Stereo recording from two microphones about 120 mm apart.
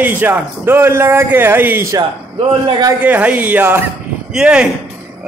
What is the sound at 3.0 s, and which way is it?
Speech, 15° right (ahead or behind).